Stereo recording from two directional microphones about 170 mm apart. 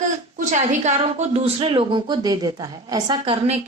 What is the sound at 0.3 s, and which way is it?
A woman's voice, 45° right (ahead or behind).